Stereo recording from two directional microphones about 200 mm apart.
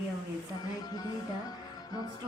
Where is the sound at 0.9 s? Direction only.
20° left (ahead or behind).